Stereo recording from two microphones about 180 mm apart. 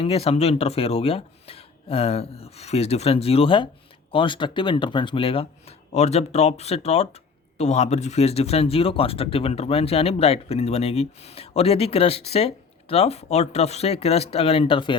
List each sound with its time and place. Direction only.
0.0 s speech: 30° left (ahead or behind)